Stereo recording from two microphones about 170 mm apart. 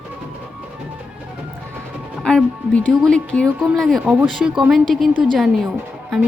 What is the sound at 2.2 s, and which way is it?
Speech, 5° left (ahead or behind).